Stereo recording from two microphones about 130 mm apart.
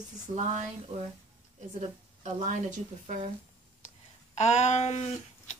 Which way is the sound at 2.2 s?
70° right (ahead or behind).